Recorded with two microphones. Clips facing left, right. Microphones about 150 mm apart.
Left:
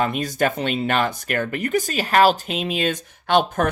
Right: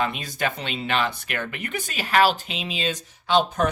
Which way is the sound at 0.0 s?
45° left (ahead or behind).